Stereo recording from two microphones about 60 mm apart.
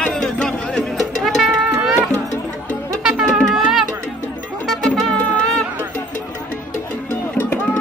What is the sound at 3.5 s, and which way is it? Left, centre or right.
Music, centre.